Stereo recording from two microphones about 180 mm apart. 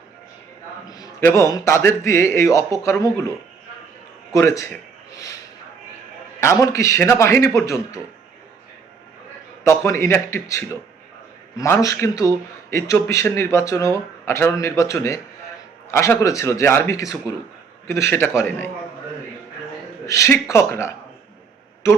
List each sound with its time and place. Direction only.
0.9 s speech: 20° left (ahead or behind)
4.3 s speech: 15° left (ahead or behind)
6.4 s speech: 15° left (ahead or behind)
9.6 s speech: 15° left (ahead or behind)
20.1 s speech: 15° left (ahead or behind)